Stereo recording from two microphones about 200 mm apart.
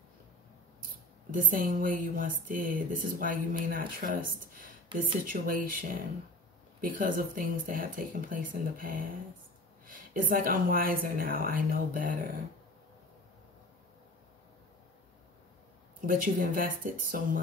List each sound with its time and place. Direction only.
1.3 s speech: 45° right (ahead or behind)
16.1 s speech: 45° right (ahead or behind)